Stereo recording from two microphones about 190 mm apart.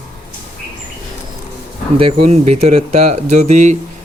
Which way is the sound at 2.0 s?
30° right (ahead or behind).